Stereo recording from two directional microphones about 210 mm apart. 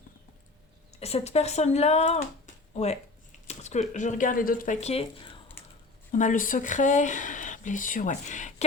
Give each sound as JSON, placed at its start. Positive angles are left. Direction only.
{"t": 0.9, "sound": "speech", "side_deg": 30}